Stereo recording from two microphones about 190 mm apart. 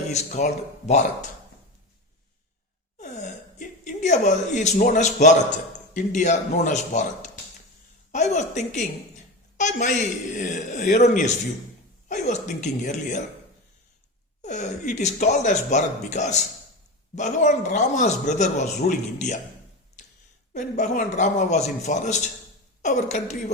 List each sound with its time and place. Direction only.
0.1 s a man's voice: 40° left (ahead or behind)
3.0 s gasp: 40° left (ahead or behind)
5.9 s a man's voice: 40° left (ahead or behind)
14.4 s a man's voice: 40° left (ahead or behind)
20.5 s a man's voice: 40° left (ahead or behind)